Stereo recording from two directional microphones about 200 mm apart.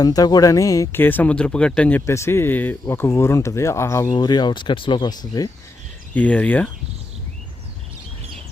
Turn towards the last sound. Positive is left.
turn(degrees=5)  # may be behind; listen again after turning